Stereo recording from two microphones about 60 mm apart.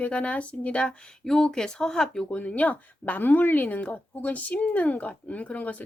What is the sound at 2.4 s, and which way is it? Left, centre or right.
Speech, left.